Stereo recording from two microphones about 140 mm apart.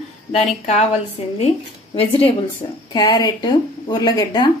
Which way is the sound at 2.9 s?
30° left (ahead or behind).